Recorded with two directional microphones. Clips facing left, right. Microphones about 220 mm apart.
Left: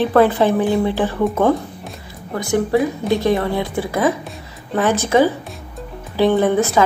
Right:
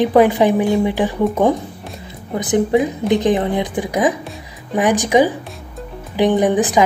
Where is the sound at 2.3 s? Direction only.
20° right (ahead or behind).